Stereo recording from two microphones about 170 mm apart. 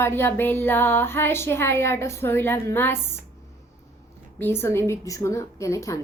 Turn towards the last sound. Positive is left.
turn(degrees=20)  # may be behind; listen again after turning